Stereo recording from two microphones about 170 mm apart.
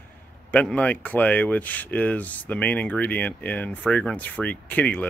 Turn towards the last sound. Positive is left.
turn(degrees=10)  # may be behind; listen again after turning